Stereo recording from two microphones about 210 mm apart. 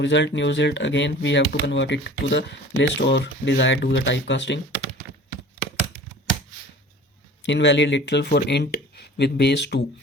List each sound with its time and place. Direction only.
0.0 s speech: 55° left (ahead or behind)
7.4 s speech: 55° left (ahead or behind)